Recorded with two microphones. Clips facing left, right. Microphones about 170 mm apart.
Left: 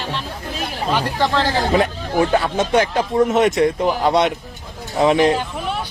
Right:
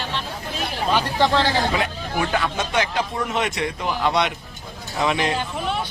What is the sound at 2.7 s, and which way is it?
Speech, 45° left (ahead or behind).